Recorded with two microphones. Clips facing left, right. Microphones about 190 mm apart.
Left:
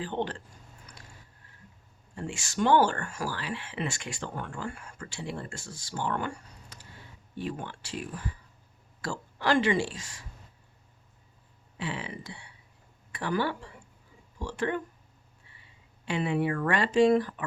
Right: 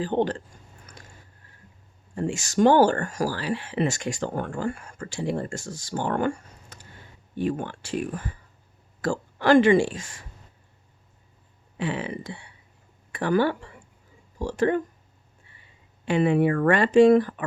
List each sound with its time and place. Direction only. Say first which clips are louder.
0.0 s speech: right 8 dB; 40° right (ahead or behind)
2.1 s speech: right 8 dB; 45° right (ahead or behind)
11.8 s speech: right 7 dB; 50° right (ahead or behind)
14.3 s speech: right 8 dB; 40° right (ahead or behind)
16.0 s speech: right 7 dB; 50° right (ahead or behind)